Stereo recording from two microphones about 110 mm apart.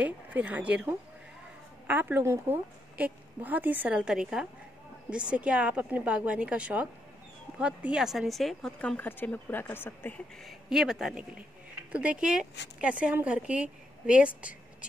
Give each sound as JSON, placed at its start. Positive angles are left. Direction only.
{"t": 0.0, "sound": "speech", "side_deg": -15}
{"t": 10.4, "sound": "speech", "side_deg": -5}